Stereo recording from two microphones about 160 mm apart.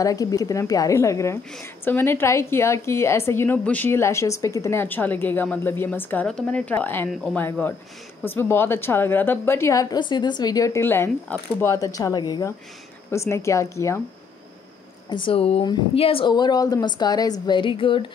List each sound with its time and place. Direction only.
0.0 s a woman's voice: 20° left (ahead or behind)
15.0 s a woman's voice: 30° left (ahead or behind)